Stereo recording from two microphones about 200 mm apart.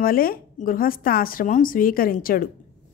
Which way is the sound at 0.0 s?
45° left (ahead or behind).